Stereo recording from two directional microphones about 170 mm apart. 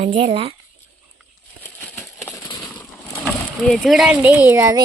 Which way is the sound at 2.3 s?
20° left (ahead or behind).